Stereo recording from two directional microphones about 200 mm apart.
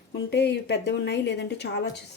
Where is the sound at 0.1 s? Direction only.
55° left (ahead or behind).